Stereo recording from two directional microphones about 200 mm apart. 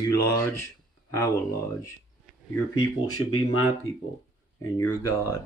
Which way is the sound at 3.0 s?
90° left.